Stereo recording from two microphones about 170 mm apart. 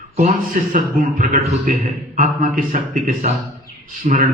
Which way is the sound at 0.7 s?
50° right (ahead or behind).